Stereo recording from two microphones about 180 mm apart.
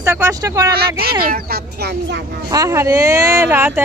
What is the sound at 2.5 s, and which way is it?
Speech, 15° right (ahead or behind).